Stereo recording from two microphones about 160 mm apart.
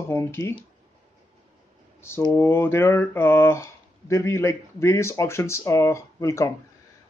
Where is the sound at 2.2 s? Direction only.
20° left (ahead or behind).